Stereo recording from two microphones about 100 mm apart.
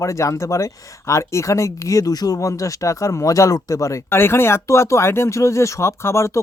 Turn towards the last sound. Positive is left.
turn(degrees=25)  # may be behind; listen again after turning